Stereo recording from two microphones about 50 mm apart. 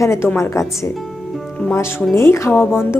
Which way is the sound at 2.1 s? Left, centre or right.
Left.